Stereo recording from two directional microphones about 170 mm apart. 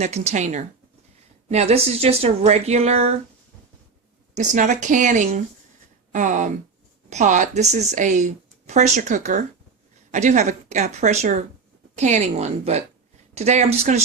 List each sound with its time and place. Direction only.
0.0 s speech: 40° right (ahead or behind)
4.4 s speech: 45° right (ahead or behind)